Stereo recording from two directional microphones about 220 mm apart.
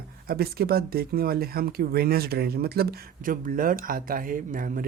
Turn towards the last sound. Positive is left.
turn(degrees=-40)  # may be behind; listen again after turning